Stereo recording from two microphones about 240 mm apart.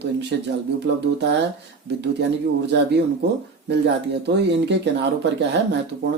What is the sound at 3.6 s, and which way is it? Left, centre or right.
Speech, right.